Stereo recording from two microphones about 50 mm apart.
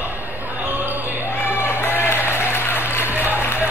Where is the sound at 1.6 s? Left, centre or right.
Left.